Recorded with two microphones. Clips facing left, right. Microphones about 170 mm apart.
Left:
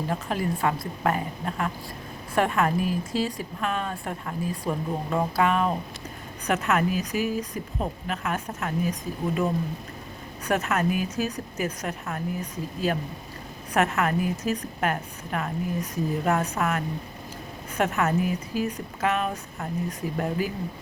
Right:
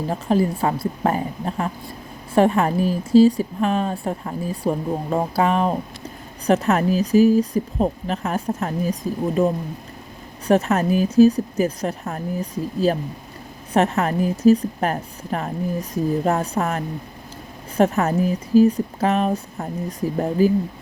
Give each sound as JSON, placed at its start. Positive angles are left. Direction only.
{"t": 0.1, "sound": "speech", "side_deg": -30}